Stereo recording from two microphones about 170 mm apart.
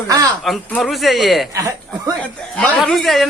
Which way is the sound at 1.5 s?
20° right (ahead or behind).